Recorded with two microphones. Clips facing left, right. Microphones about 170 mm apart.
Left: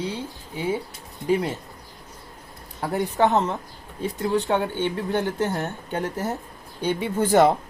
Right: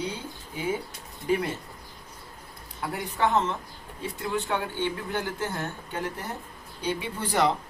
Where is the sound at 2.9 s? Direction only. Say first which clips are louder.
Left 5 dB; 40° left (ahead or behind).